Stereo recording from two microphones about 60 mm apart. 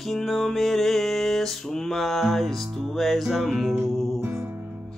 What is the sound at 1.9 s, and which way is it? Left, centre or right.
Mantra, centre.